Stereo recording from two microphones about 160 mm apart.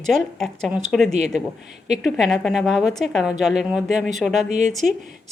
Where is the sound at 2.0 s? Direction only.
Centre (ahead or behind).